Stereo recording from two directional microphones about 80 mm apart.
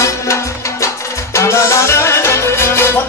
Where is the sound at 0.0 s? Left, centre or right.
Left.